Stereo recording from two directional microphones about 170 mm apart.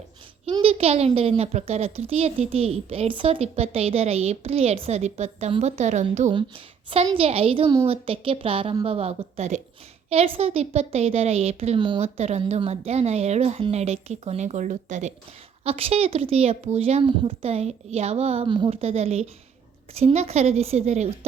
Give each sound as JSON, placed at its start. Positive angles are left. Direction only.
{"t": 0.4, "sound": "a child's voice", "side_deg": -35}
{"t": 6.9, "sound": "a child's voice", "side_deg": -35}